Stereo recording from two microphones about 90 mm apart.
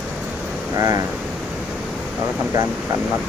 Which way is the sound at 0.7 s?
40° right (ahead or behind).